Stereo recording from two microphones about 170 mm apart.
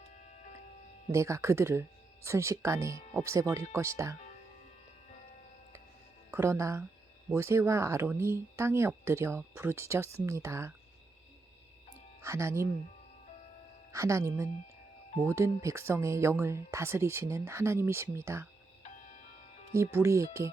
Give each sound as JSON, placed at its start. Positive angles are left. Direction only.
{"t": 1.1, "sound": "speech", "side_deg": -15}
{"t": 6.3, "sound": "speech", "side_deg": -15}
{"t": 12.2, "sound": "speech", "side_deg": -15}
{"t": 13.9, "sound": "speech", "side_deg": -15}
{"t": 18.8, "sound": "music", "side_deg": 45}
{"t": 19.7, "sound": "speech", "side_deg": -15}